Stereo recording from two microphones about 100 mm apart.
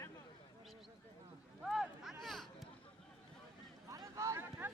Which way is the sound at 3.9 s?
30° right (ahead or behind).